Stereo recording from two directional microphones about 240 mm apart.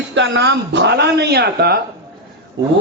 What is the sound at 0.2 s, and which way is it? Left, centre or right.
Speech, right.